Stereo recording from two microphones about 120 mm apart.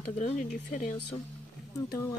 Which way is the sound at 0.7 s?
90° left.